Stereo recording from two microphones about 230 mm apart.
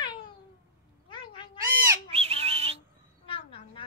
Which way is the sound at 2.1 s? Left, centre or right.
Right.